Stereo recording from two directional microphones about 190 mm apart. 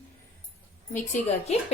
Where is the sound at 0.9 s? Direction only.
40° left (ahead or behind).